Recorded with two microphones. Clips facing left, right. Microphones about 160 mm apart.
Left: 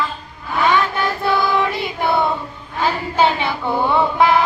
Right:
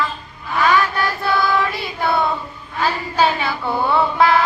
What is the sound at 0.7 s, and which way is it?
Child singing, 20° left (ahead or behind).